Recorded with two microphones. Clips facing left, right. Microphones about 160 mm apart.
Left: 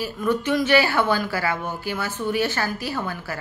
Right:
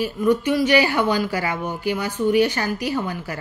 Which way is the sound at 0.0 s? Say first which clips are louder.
Right 4 dB; 10° right (ahead or behind).